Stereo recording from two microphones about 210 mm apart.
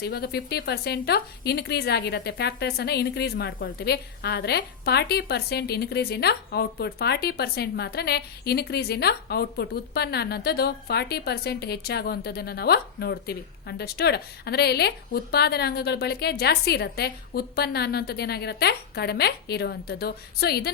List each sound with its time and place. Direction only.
0.0 s a woman's voice: 50° left (ahead or behind)